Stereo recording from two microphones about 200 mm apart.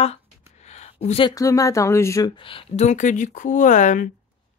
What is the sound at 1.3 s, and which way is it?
Speech, 15° left (ahead or behind).